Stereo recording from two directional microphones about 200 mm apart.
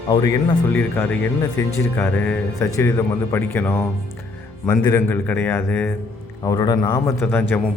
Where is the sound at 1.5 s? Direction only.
10° left (ahead or behind).